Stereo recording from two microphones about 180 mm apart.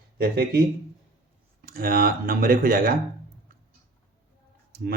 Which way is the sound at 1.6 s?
55° right (ahead or behind).